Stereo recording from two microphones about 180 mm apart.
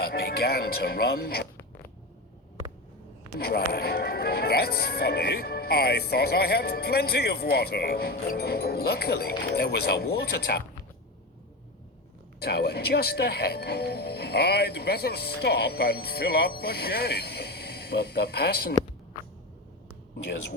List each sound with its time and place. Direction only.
0.1 s speech: 60° left (ahead or behind)
3.3 s speech: 60° left (ahead or behind)
12.4 s speech: 60° left (ahead or behind)